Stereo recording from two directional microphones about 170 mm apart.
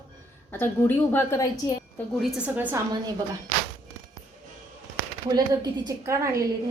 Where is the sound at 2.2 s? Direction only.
5° right (ahead or behind).